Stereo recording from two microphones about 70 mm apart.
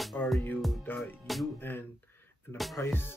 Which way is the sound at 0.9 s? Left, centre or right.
Left.